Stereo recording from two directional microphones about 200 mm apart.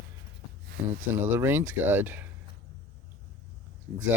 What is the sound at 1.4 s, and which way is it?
Speech, 10° right (ahead or behind).